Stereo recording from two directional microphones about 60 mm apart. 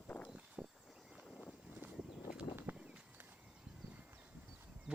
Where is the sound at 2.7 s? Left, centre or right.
Right.